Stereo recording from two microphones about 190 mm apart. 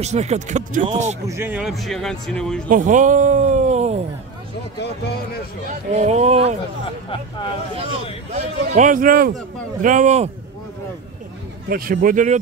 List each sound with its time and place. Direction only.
0.0 s speech: 35° right (ahead or behind)
1.3 s speech: 10° right (ahead or behind)
2.7 s speech: 45° right (ahead or behind)
5.9 s speech: 35° right (ahead or behind)
8.3 s a man's voice: 40° right (ahead or behind)
11.7 s a man's voice: 45° right (ahead or behind)